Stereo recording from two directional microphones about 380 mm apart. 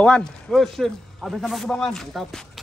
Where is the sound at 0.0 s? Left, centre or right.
Centre.